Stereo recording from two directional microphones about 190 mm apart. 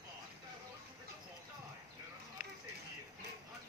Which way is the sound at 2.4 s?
45° left (ahead or behind).